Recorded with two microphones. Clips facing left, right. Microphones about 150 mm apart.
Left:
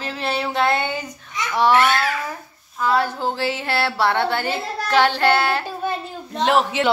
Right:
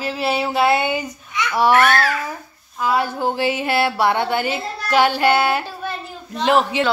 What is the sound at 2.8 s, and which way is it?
Speech, 10° right (ahead or behind).